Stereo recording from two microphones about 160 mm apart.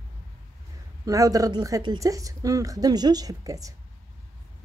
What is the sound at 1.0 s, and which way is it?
Speech, 20° right (ahead or behind).